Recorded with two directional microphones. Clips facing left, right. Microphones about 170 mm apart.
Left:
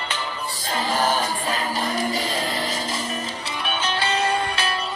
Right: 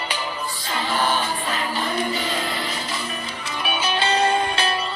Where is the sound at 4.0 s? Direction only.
30° right (ahead or behind).